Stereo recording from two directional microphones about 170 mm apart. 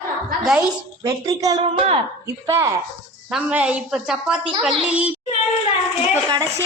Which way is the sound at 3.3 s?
5° right (ahead or behind).